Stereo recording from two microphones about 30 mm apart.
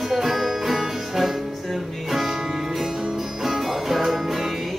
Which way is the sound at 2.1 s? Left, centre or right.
Centre.